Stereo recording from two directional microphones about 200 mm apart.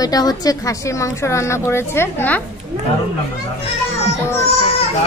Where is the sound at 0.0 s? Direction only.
20° left (ahead or behind).